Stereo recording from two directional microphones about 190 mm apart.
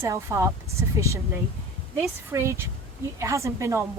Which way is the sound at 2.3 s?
15° right (ahead or behind).